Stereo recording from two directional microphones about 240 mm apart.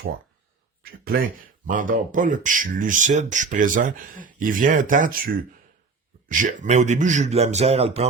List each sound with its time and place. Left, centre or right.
0.8 s a man's voice: right